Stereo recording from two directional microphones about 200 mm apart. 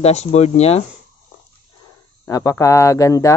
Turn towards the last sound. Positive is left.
turn(degrees=15)  # may be behind; listen again after turning